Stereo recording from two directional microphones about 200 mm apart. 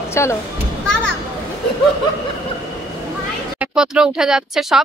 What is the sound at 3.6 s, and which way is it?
Speech, 5° right (ahead or behind).